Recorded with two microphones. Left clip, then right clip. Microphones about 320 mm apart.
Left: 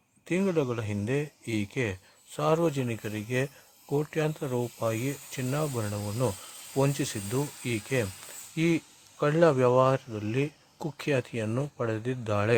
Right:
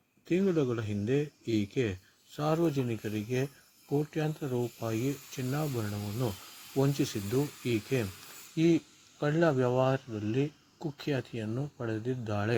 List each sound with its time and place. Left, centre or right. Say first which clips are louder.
0.3 s speech: left 1 dB; centre